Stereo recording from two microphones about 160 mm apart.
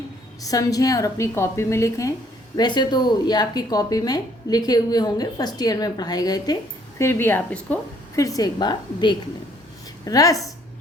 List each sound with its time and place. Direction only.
0.4 s a woman's voice: 20° left (ahead or behind)
8.2 s speech: 20° left (ahead or behind)